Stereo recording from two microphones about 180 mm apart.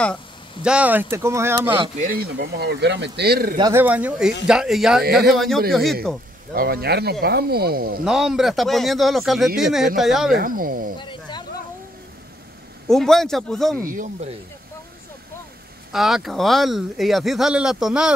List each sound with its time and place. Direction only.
0.6 s speech: 5° right (ahead or behind)
2.0 s speech: 55° right (ahead or behind)
3.7 s speech: 10° right (ahead or behind)
6.5 s speech: 55° right (ahead or behind)
8.0 s speech: 5° right (ahead or behind)
10.3 s speech: 50° right (ahead or behind)
11.0 s a sound: 25° left (ahead or behind)
12.8 s speech: centre (ahead or behind)
13.8 s speech: 45° right (ahead or behind)
15.9 s speech: centre (ahead or behind)